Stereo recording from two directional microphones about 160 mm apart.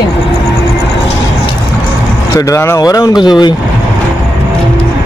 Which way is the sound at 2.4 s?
20° left (ahead or behind).